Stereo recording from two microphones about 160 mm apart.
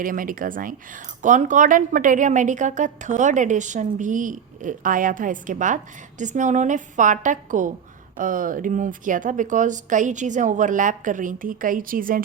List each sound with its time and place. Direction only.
0.0 s speech: 60° right (ahead or behind)